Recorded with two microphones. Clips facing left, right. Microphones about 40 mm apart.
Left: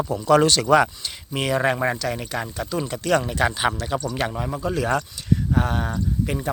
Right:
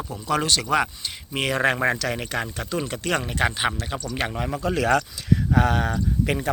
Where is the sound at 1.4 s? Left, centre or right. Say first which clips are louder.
Even; right.